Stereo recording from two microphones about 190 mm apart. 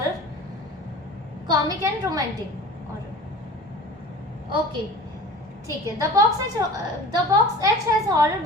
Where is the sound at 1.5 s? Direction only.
20° right (ahead or behind).